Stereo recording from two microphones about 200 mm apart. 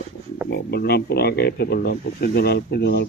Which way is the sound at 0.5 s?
50° left (ahead or behind).